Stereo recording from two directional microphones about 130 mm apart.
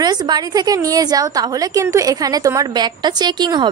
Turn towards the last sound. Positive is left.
turn(degrees=-35)  # may be behind; listen again after turning